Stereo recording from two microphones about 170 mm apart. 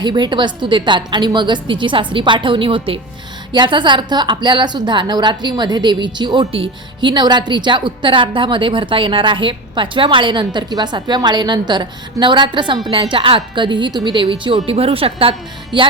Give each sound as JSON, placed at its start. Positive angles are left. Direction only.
{"t": 0.0, "sound": "a woman's voice", "side_deg": -25}